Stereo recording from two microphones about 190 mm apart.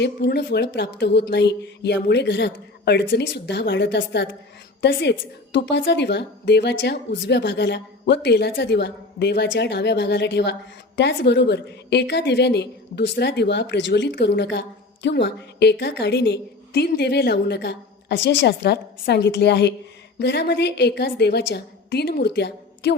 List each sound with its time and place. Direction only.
0.0 s a woman's voice: 60° left (ahead or behind)